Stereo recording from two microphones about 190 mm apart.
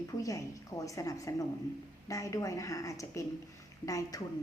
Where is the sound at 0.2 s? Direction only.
15° left (ahead or behind).